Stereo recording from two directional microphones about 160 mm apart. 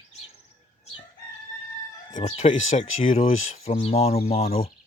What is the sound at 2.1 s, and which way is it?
Speech, 50° left (ahead or behind).